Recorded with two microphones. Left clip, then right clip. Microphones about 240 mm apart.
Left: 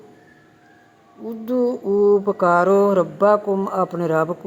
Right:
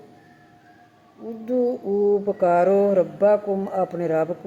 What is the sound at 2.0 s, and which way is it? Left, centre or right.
Speech, left.